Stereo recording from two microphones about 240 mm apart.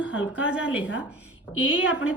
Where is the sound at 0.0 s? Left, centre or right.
Centre.